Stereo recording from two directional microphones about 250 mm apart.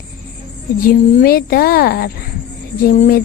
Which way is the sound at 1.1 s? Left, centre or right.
Left.